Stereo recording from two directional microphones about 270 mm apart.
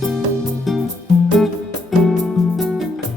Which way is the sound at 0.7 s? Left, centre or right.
Centre.